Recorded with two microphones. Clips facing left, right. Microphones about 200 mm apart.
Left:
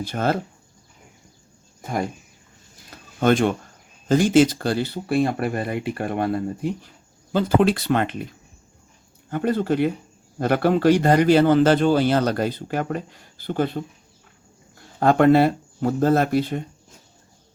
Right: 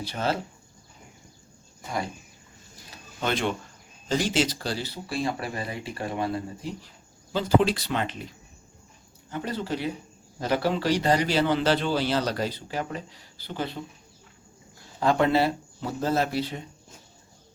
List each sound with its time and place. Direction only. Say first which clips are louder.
0.0 s a man's voice: left 5 dB; 50° left (ahead or behind)
3.2 s a man's voice: left 9 dB; 50° left (ahead or behind)
9.3 s a man's voice: left 9 dB; 55° left (ahead or behind)
14.9 s a man's voice: left 7 dB; 55° left (ahead or behind)